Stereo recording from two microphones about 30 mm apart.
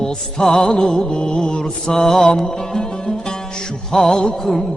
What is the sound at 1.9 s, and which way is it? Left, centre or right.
Music, centre.